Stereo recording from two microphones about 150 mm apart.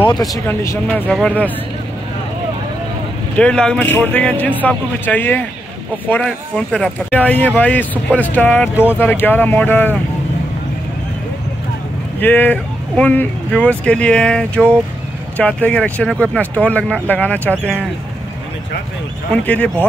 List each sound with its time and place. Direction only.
0.1 s speech: 25° left (ahead or behind)
0.5 s speech: 15° left (ahead or behind)
3.3 s speech: 5° left (ahead or behind)
12.2 s speech: 10° left (ahead or behind)
19.3 s speech: 10° left (ahead or behind)